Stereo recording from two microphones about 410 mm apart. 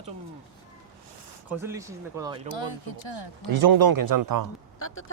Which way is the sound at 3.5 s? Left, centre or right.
Right.